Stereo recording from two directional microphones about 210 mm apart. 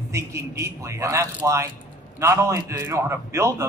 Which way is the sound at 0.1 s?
15° right (ahead or behind).